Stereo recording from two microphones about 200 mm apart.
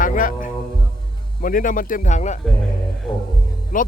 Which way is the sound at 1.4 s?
45° left (ahead or behind).